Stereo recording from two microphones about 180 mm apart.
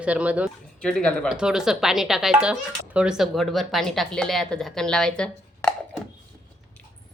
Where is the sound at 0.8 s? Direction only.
5° left (ahead or behind).